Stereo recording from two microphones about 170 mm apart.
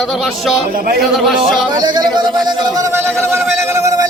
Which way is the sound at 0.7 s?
60° right (ahead or behind).